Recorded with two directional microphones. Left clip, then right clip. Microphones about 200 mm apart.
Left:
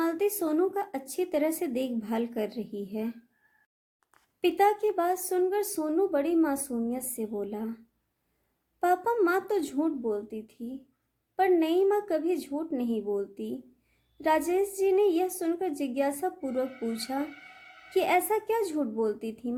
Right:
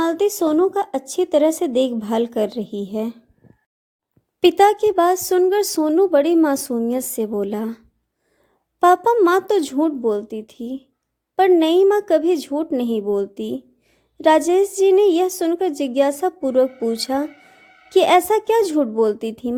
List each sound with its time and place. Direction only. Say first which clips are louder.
0.0 s a woman's voice: right 10 dB; 40° right (ahead or behind)
4.4 s speech: right 11 dB; 45° right (ahead or behind)
8.8 s speech: right 12 dB; 45° right (ahead or behind)